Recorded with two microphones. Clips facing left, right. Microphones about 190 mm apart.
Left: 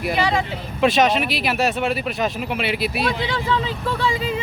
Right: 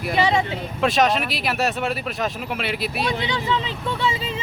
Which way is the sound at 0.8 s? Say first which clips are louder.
Left 2 dB; centre (ahead or behind).